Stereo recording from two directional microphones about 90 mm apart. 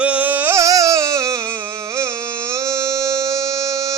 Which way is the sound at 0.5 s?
35° right (ahead or behind).